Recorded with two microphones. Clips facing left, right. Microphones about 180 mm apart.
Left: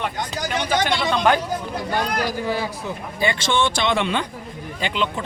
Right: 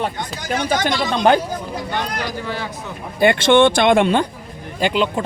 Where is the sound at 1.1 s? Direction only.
35° right (ahead or behind).